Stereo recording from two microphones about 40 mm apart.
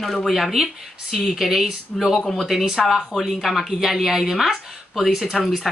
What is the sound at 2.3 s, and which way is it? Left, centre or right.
Speech, centre.